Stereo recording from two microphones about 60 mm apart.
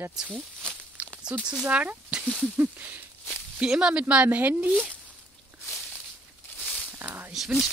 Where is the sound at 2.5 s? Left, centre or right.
Right.